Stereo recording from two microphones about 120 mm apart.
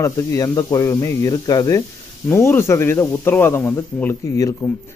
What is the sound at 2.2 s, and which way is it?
A man's voice, 20° left (ahead or behind).